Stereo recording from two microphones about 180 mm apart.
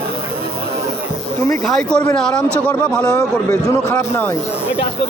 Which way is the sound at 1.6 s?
Centre (ahead or behind).